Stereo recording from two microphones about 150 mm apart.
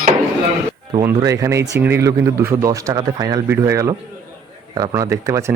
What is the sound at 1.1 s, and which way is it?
Speech, 20° right (ahead or behind).